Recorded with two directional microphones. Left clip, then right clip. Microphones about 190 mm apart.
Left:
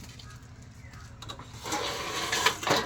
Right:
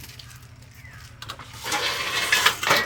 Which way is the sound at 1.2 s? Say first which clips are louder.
Right 6 dB; 15° left (ahead or behind).